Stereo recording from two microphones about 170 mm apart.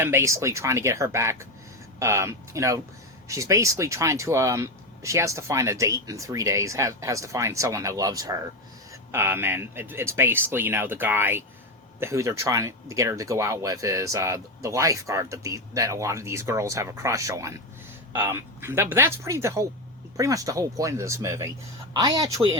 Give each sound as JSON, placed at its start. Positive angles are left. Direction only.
{"t": 0.0, "sound": "speech", "side_deg": -15}